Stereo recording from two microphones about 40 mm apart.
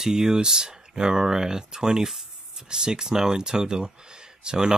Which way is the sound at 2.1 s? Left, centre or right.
Centre.